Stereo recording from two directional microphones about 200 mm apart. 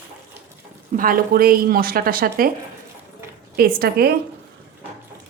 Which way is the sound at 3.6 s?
50° right (ahead or behind).